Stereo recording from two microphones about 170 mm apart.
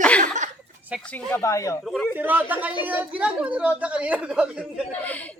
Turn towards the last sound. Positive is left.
turn(degrees=10)  # may be behind; listen again after turning